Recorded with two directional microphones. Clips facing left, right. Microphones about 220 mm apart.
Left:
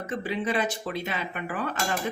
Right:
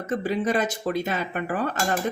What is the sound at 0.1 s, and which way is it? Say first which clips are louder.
Speech: right 5 dB; 40° right (ahead or behind).